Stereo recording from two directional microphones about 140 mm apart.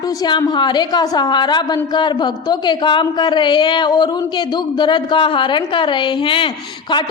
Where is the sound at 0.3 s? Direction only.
30° left (ahead or behind).